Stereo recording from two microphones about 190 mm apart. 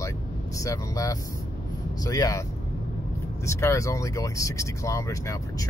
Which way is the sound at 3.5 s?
15° left (ahead or behind).